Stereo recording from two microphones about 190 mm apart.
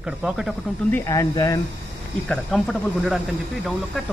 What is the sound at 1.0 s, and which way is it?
Speech, 15° left (ahead or behind).